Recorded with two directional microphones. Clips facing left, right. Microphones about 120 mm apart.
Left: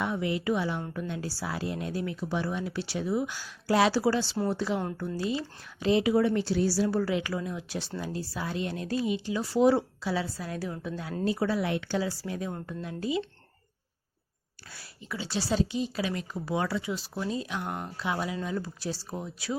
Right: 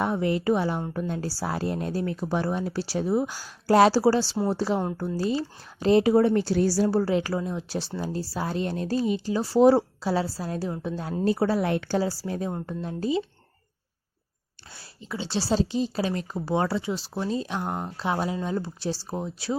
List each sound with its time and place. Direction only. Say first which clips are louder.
0.0 s speech: right 5 dB; 40° right (ahead or behind)
14.7 s speech: right 3 dB; 25° right (ahead or behind)